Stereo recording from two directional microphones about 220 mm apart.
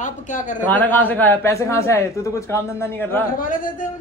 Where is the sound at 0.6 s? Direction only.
10° left (ahead or behind).